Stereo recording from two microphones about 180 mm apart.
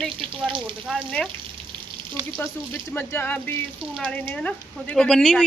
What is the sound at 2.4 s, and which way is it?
A woman's voice, 15° left (ahead or behind).